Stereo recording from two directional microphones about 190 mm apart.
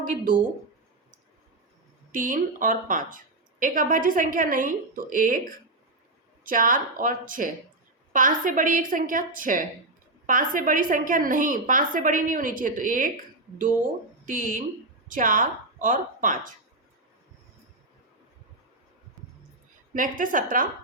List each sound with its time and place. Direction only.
2.1 s a woman's voice: 45° right (ahead or behind)
19.9 s a woman's voice: 45° right (ahead or behind)